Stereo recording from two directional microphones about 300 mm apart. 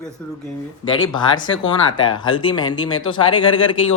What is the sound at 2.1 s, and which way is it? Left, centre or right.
Speech, centre.